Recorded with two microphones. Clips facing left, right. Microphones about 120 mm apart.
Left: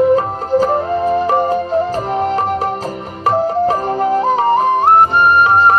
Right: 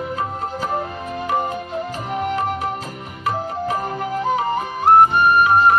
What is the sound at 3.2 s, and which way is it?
Music, 40° left (ahead or behind).